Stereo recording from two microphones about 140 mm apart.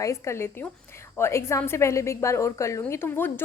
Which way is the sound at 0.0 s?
20° left (ahead or behind).